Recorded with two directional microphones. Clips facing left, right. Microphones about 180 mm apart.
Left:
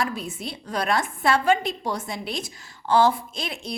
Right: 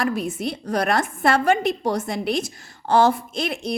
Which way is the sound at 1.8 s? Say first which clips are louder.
Right 6 dB; 60° right (ahead or behind).